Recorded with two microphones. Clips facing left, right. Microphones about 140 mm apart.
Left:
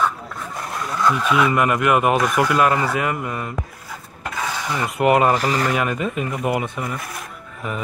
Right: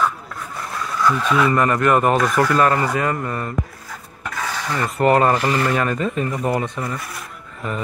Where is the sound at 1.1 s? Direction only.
5° left (ahead or behind).